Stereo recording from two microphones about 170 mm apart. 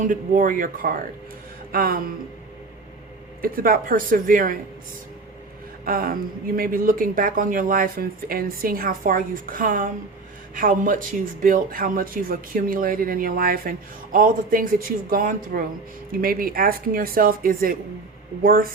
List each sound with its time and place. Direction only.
0.0 s speech: 50° right (ahead or behind)
3.4 s speech: 60° right (ahead or behind)
5.8 s speech: 55° right (ahead or behind)